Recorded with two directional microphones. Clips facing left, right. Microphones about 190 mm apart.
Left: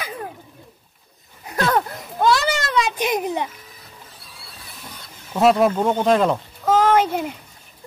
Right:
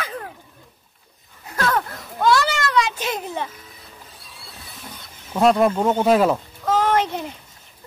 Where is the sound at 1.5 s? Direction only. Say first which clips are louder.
Left 2 dB; 20° left (ahead or behind).